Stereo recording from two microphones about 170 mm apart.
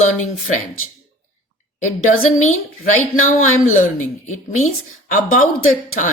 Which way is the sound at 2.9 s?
50° left (ahead or behind).